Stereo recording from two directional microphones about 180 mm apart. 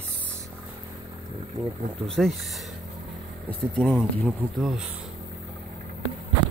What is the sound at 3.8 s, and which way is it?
Speech, centre (ahead or behind).